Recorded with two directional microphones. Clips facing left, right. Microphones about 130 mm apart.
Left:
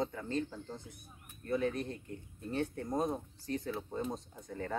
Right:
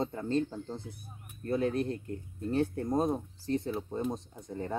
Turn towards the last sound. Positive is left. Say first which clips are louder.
# right 3 dB
turn(degrees=-20)  # may be behind; listen again after turning